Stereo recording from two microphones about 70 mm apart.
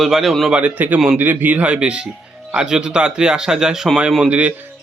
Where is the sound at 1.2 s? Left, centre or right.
Right.